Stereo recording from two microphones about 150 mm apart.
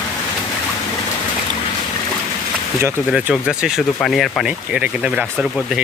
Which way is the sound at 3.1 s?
5° right (ahead or behind).